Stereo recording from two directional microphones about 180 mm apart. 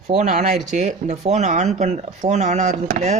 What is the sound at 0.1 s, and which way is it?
Speech, 45° right (ahead or behind).